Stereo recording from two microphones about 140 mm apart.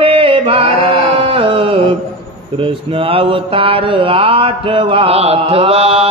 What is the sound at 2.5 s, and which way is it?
Mantra, 40° right (ahead or behind).